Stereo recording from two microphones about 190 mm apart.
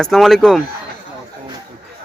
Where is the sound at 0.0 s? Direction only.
Centre (ahead or behind).